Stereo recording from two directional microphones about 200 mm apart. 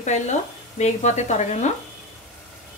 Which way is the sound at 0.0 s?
35° left (ahead or behind).